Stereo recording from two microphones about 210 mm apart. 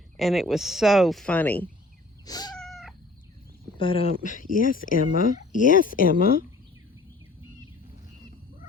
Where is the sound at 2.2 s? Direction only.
20° left (ahead or behind).